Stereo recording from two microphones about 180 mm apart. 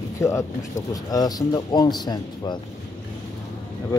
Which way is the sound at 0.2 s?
15° left (ahead or behind).